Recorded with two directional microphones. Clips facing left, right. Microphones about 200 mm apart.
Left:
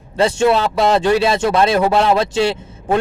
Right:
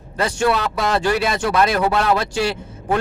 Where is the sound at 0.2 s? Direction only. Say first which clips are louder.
Left 5 dB; 25° left (ahead or behind).